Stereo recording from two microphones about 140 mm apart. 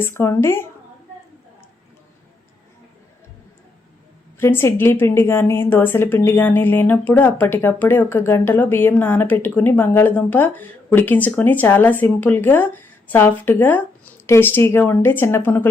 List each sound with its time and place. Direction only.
0.0 s speech: 20° left (ahead or behind)
4.4 s a woman's voice: 15° left (ahead or behind)